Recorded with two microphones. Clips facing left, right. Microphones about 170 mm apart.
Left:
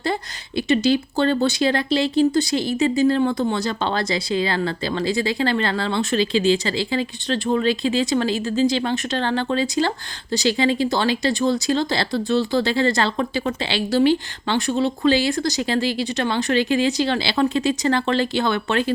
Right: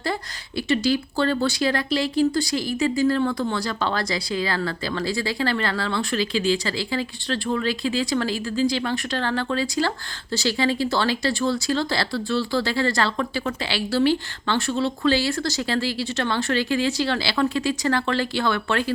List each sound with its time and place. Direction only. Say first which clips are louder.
0.0 s speech: left 3 dB; 20° left (ahead or behind)